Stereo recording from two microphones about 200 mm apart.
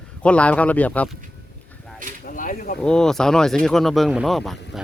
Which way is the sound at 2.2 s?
40° left (ahead or behind).